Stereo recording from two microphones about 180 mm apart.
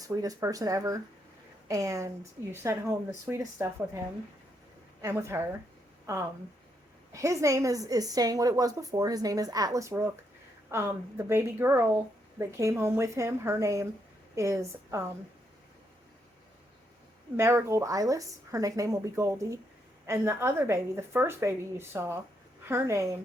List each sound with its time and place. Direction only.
0.0 s a woman's voice: 20° right (ahead or behind)
5.0 s speech: 15° right (ahead or behind)
7.1 s a woman's voice: 15° right (ahead or behind)
17.3 s speech: 15° right (ahead or behind)